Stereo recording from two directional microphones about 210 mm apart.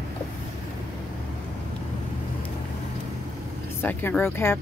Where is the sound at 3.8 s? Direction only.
10° left (ahead or behind).